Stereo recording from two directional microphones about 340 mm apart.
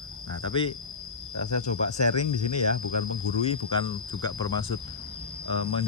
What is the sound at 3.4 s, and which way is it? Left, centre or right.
Speech, centre.